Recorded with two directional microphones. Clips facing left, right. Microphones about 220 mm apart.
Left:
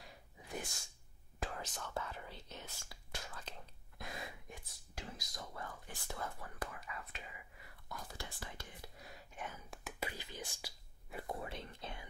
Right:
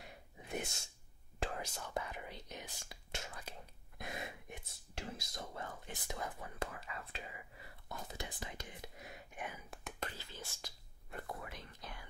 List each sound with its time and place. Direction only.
0.0 s a sound: 20° right (ahead or behind)
1.6 s whispering: 10° right (ahead or behind)
3.5 s whispering: 10° right (ahead or behind)
4.0 s speech: 20° right (ahead or behind)
9.7 s whispering: 5° left (ahead or behind)
11.2 s speech: 30° left (ahead or behind)